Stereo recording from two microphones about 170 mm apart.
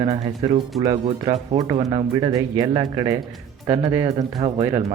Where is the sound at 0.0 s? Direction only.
35° right (ahead or behind).